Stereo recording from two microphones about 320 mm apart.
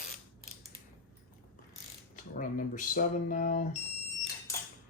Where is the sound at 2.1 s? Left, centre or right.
Left.